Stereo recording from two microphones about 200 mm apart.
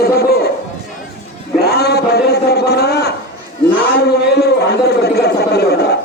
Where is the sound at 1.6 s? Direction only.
50° left (ahead or behind).